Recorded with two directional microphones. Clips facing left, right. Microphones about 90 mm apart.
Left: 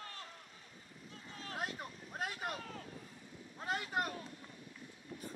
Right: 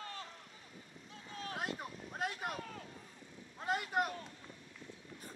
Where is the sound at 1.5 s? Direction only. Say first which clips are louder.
Right 1 dB; centre (ahead or behind).